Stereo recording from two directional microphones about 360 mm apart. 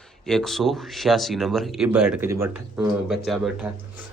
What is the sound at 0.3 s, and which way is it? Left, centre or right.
Speech, centre.